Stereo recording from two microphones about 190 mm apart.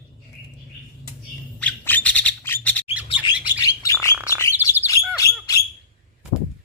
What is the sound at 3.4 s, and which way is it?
Bird, 20° left (ahead or behind).